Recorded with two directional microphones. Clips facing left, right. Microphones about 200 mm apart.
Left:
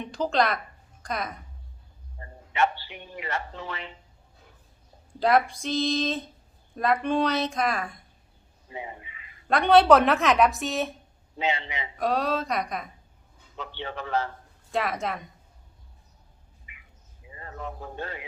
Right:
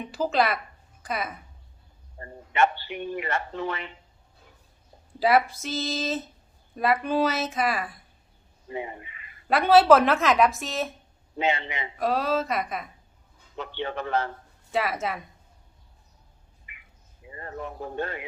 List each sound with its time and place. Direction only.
0.0 s a woman's voice: 5° right (ahead or behind)
2.1 s speech: 55° right (ahead or behind)
5.2 s a woman's voice: 5° right (ahead or behind)
8.7 s speech: 55° right (ahead or behind)
9.5 s a woman's voice: 5° right (ahead or behind)
11.3 s a man's voice: 55° right (ahead or behind)
11.9 s a woman's voice: centre (ahead or behind)
13.7 s speech: 55° right (ahead or behind)
14.7 s a woman's voice: 5° right (ahead or behind)
17.9 s speech: 55° right (ahead or behind)